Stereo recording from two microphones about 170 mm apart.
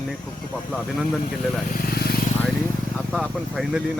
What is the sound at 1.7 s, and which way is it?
Vehicle, 60° left (ahead or behind).